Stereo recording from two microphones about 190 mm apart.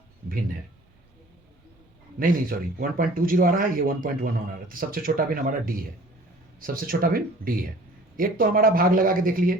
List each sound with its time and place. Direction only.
2.1 s speech: 50° right (ahead or behind)